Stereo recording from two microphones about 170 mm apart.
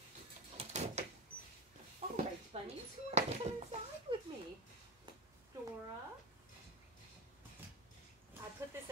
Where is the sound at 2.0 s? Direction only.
40° right (ahead or behind).